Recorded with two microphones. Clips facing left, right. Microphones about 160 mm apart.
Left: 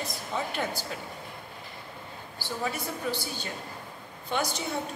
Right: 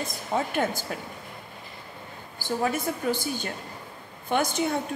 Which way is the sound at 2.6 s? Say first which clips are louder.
Right 5 dB; 50° right (ahead or behind).